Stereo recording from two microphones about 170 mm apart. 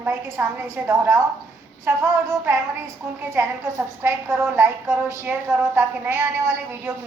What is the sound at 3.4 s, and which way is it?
A woman's voice, 15° right (ahead or behind).